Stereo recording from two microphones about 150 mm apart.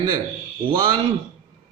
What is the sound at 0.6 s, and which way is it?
Speech, 35° right (ahead or behind).